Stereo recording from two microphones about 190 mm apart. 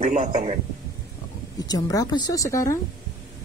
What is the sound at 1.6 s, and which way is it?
A woman's voice, 20° left (ahead or behind).